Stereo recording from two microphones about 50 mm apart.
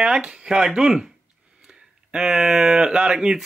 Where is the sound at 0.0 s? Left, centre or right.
Centre.